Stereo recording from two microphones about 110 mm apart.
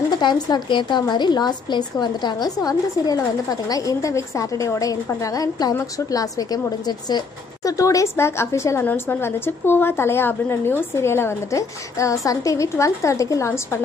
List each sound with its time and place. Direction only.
0.2 s a woman's voice: 45° left (ahead or behind); by 13.7 s 25° left (ahead or behind)